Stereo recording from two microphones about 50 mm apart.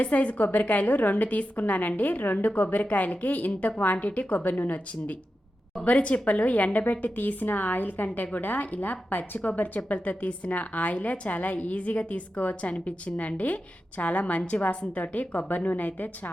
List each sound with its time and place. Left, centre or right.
0.0 s a woman's voice: left